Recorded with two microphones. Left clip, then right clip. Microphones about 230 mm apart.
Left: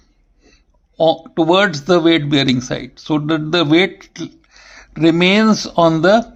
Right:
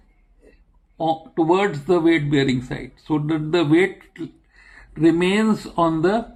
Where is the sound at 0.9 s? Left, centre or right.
Left.